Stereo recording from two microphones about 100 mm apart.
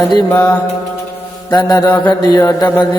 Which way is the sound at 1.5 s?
45° left (ahead or behind).